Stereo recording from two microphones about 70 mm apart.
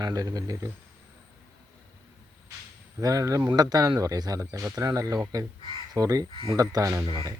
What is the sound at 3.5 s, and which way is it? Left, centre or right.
Speech, right.